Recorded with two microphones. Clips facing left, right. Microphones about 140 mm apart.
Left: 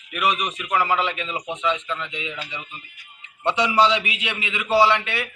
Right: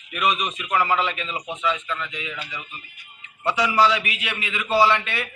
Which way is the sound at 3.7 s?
20° left (ahead or behind).